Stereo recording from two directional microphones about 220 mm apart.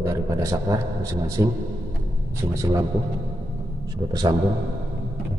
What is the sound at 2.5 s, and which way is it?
Speech, 15° right (ahead or behind).